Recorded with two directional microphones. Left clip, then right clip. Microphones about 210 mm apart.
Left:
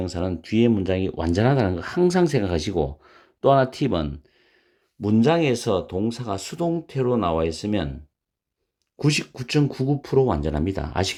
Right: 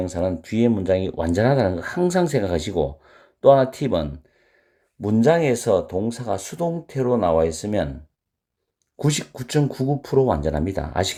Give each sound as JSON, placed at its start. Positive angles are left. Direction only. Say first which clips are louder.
{"t": 0.0, "sound": "speech", "louder": "right 4 dB", "side_deg": 30}
{"t": 9.0, "sound": "speech", "louder": "left 1 dB", "side_deg": 25}